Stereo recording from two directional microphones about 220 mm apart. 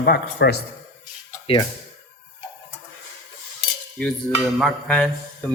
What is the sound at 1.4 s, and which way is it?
Speech, 25° left (ahead or behind).